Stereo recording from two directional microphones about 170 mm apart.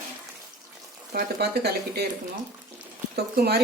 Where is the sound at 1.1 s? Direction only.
70° right (ahead or behind).